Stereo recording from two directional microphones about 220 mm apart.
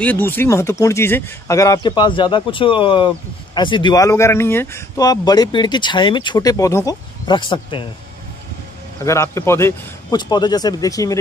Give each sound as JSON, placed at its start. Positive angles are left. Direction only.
{"t": 0.0, "sound": "speech", "side_deg": 10}
{"t": 9.0, "sound": "speech", "side_deg": 15}